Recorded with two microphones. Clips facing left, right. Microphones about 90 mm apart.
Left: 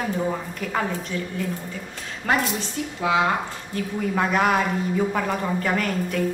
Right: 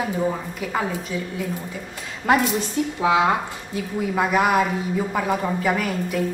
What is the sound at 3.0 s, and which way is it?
Speech, 20° right (ahead or behind).